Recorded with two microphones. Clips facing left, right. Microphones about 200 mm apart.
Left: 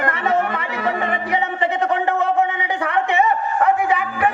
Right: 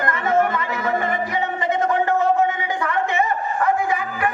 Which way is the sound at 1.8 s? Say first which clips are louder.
Right 2 dB; 65° left (ahead or behind).